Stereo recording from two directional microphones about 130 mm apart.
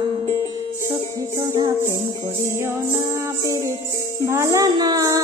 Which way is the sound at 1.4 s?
25° right (ahead or behind).